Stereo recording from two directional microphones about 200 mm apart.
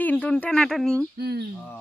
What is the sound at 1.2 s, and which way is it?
Speech, 55° right (ahead or behind).